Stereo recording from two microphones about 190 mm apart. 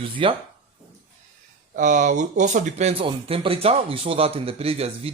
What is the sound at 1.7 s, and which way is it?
Speech, 40° right (ahead or behind).